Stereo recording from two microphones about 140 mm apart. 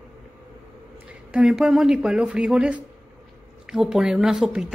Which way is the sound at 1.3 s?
5° right (ahead or behind).